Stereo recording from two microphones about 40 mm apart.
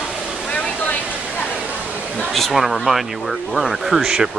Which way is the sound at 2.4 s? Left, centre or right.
Centre.